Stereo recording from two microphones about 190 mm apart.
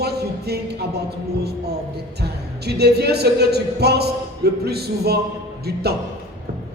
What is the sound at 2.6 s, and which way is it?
A man's voice, 60° right (ahead or behind).